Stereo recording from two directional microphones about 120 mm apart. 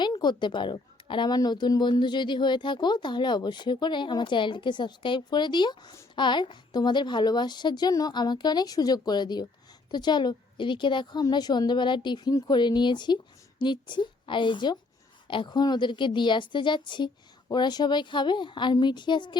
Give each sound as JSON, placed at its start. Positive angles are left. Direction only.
{"t": 0.0, "sound": "a woman's voice", "side_deg": 40}